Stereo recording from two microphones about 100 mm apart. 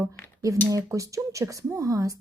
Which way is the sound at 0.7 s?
35° right (ahead or behind).